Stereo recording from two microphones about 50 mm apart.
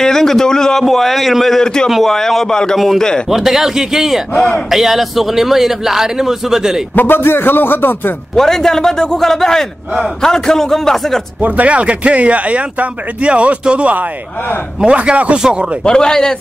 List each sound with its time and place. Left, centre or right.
0.0 s a man's voice: centre
3.3 s speech: centre
7.0 s a man's voice: left
8.4 s a man's voice: centre
11.4 s speech: right
15.8 s a man's voice: centre